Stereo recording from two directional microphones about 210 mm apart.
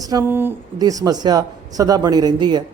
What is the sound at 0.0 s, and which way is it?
A woman's voice, 15° right (ahead or behind).